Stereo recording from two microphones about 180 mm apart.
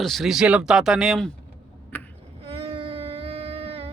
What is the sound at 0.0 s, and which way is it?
Speech, centre (ahead or behind).